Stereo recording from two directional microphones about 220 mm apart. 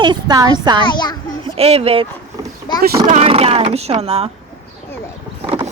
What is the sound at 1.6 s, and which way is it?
Speech, 25° right (ahead or behind).